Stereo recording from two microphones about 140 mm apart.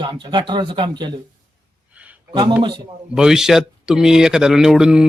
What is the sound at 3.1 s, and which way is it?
Speech, 5° right (ahead or behind).